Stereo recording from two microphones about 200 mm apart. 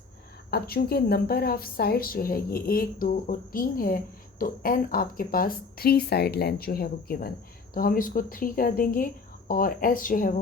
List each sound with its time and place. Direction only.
0.5 s a woman's voice: 50° left (ahead or behind)